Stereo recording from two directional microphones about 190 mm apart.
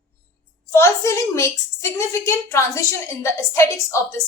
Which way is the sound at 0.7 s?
15° left (ahead or behind).